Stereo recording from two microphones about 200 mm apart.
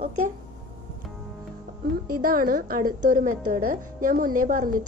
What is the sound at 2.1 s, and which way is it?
Speech, 45° right (ahead or behind).